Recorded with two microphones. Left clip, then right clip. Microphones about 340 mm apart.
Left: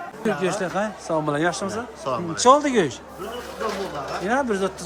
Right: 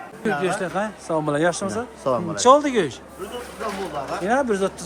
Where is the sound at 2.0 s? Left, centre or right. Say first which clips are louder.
Right 4 dB; centre.